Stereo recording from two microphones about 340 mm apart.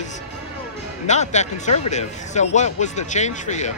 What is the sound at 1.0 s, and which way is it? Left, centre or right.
Speech, left.